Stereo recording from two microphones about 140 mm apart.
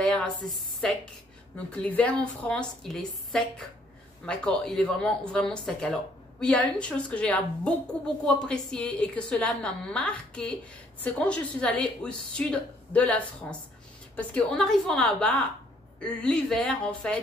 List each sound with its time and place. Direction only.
0.0 s a woman's voice: 5° left (ahead or behind)